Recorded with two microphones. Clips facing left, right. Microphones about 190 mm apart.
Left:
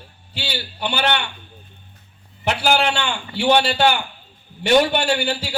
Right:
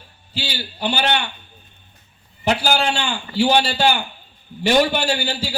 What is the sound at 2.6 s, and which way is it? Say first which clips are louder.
A man's voice: left 1 dB; 65° left (ahead or behind).